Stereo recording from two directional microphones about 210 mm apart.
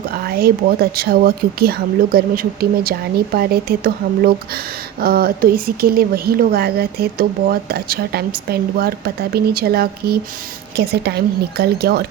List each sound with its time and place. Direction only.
0.1 s speech: 45° right (ahead or behind)